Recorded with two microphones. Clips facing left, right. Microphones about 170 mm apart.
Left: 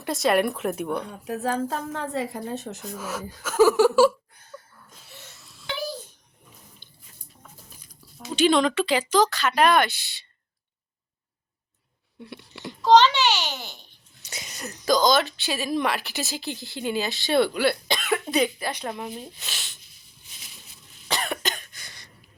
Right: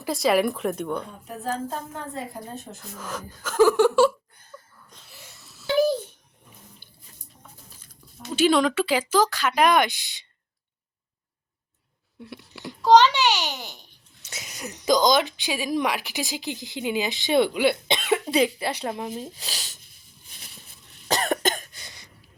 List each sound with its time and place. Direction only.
0.0 s speech: centre (ahead or behind)
1.3 s a woman's voice: 85° left
3.0 s speech: 5° left (ahead or behind)
4.9 s wheeze: centre (ahead or behind)
6.8 s a sound: 10° right (ahead or behind)
7.7 s a sound: 15° left (ahead or behind)
8.2 s speech: 5° right (ahead or behind)
12.2 s speech: 5° right (ahead or behind); by 19.0 s 30° right (ahead or behind)
19.0 s speech: 40° right (ahead or behind)
21.1 s cough: 45° right (ahead or behind)
21.7 s cough: 25° right (ahead or behind)